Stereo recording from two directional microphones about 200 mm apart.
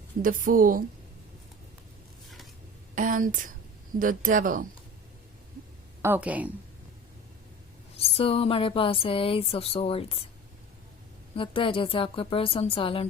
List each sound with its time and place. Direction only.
0.2 s a woman's voice: 45° right (ahead or behind)
2.9 s a woman's voice: 40° right (ahead or behind)
6.0 s a woman's voice: 10° right (ahead or behind)
8.0 s speech: 30° left (ahead or behind)
11.3 s speech: 25° left (ahead or behind)